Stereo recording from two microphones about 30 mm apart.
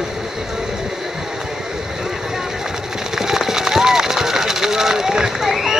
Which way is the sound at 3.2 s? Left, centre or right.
Centre.